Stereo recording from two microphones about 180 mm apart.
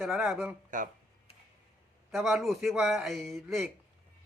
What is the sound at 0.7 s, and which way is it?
Speech, 45° right (ahead or behind).